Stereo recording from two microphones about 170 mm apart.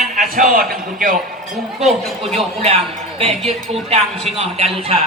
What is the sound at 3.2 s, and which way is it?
A woman's voice, 35° right (ahead or behind).